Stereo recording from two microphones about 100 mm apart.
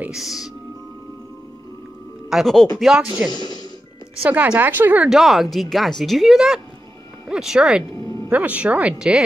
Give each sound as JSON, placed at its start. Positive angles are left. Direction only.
{"t": 0.1, "sound": "speech", "side_deg": 0}
{"t": 2.2, "sound": "speech", "side_deg": 0}
{"t": 2.8, "sound": "speech", "side_deg": -5}
{"t": 5.1, "sound": "speech", "side_deg": 0}
{"t": 7.9, "sound": "music", "side_deg": 30}
{"t": 8.3, "sound": "speech", "side_deg": -15}